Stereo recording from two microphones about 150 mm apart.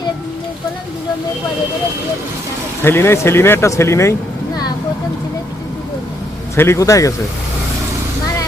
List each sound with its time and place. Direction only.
2.8 s speech: 15° left (ahead or behind)
6.6 s speech: 20° left (ahead or behind)